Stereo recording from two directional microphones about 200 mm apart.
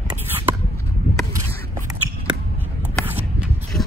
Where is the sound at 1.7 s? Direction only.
15° right (ahead or behind).